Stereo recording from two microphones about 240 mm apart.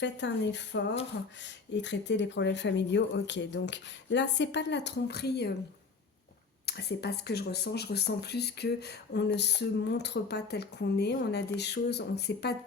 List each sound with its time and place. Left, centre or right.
0.0 s speech: left
6.7 s speech: left